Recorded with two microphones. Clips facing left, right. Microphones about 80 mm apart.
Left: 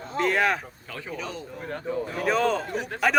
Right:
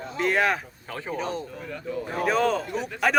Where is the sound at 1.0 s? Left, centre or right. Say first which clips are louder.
Right 5 dB; right.